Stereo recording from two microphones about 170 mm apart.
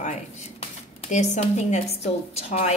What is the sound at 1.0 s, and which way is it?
Speech, 45° left (ahead or behind).